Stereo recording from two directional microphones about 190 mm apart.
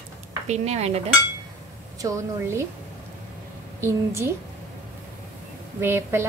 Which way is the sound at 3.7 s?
15° right (ahead or behind).